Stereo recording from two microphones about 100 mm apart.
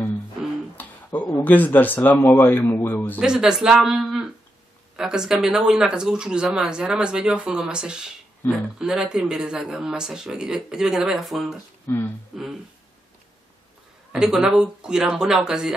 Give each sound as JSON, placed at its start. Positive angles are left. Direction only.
{"t": 0.7, "sound": "speech", "side_deg": 15}
{"t": 3.2, "sound": "speech", "side_deg": -5}
{"t": 11.9, "sound": "speech", "side_deg": 20}
{"t": 12.3, "sound": "speech", "side_deg": -5}
{"t": 14.1, "sound": "speech", "side_deg": -5}